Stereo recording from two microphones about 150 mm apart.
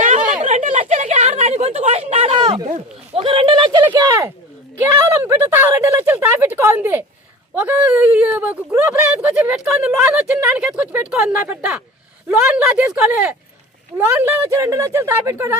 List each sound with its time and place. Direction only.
0.4 s a sound: 50° right (ahead or behind); by 2.6 s 30° right (ahead or behind)
3.2 s speech: 35° right (ahead or behind)
4.8 s speech: 15° right (ahead or behind)